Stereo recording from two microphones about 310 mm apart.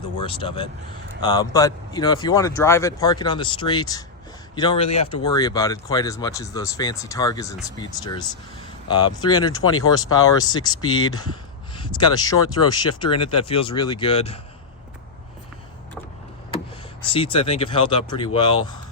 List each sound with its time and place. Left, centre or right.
0.3 s speech: centre
9.5 s speech: left
9.9 s speech: centre
10.8 s speech: left
11.9 s speech: centre
17.1 s speech: centre